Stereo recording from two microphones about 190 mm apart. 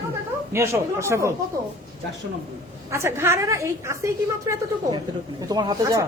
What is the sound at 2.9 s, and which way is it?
A woman's voice, 15° right (ahead or behind).